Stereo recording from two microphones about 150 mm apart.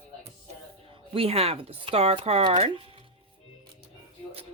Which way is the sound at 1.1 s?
40° right (ahead or behind).